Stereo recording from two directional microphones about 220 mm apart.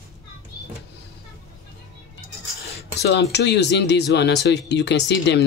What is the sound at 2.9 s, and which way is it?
Speech, 50° left (ahead or behind).